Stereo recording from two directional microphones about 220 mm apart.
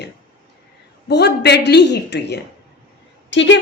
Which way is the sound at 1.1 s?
50° left (ahead or behind).